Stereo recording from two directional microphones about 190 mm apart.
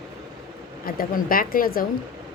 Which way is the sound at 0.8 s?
50° left (ahead or behind).